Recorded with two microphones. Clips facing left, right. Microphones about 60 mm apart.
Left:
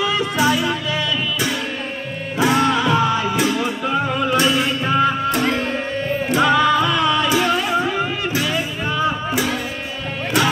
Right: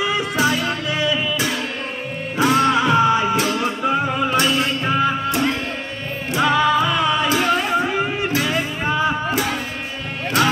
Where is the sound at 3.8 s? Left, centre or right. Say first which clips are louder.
Right 2 dB; centre.